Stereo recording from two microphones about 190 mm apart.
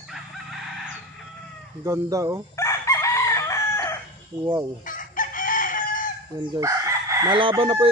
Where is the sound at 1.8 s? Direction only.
15° right (ahead or behind).